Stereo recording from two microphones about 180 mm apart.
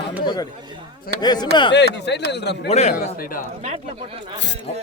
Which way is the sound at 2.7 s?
40° left (ahead or behind).